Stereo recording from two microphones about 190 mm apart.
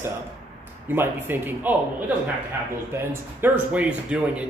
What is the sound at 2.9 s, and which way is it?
Speech, 10° right (ahead or behind).